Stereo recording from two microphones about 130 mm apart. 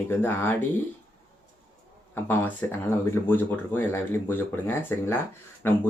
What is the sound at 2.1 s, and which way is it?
Speech, 20° left (ahead or behind).